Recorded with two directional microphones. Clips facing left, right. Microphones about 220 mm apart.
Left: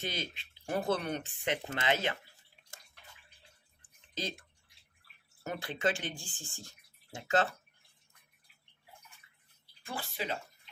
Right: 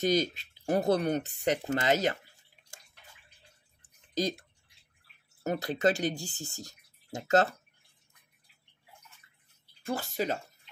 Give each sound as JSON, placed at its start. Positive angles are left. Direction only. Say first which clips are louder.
{"t": 0.0, "sound": "speech", "louder": "right 12 dB", "side_deg": -40}
{"t": 4.1, "sound": "speech", "louder": "right 9 dB", "side_deg": -40}
{"t": 5.4, "sound": "speech", "louder": "right 6 dB", "side_deg": -40}
{"t": 9.8, "sound": "speech", "louder": "right 7 dB", "side_deg": -45}